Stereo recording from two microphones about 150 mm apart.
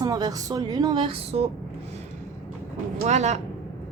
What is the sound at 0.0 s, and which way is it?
Speech, 25° right (ahead or behind).